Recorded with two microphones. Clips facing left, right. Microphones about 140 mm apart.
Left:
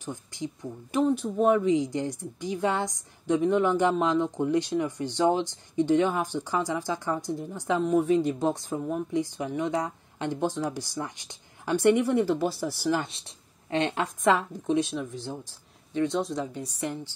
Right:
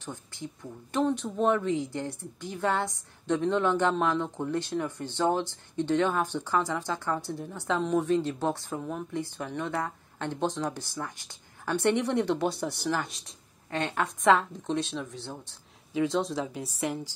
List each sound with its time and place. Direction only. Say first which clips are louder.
0.0 s a woman's voice: left 4 dB; 15° left (ahead or behind)
12.1 s speech: left 2 dB; 5° left (ahead or behind)
12.9 s speech: left 3 dB; 25° left (ahead or behind)
14.2 s a woman's voice: right 1 dB; centre (ahead or behind)
15.9 s speech: even; 5° right (ahead or behind)